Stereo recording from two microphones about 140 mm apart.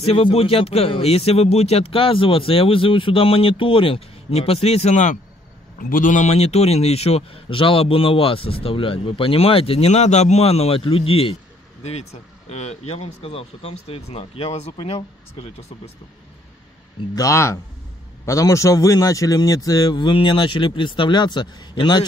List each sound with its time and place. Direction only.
0.0 s a man's voice: 45° left (ahead or behind); by 5.2 s 60° left (ahead or behind)
5.8 s a man's voice: 80° left; by 15.0 s 40° left (ahead or behind)
17.1 s a man's voice: 20° left (ahead or behind)